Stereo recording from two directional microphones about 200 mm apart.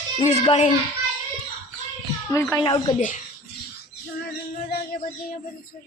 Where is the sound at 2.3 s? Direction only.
15° left (ahead or behind).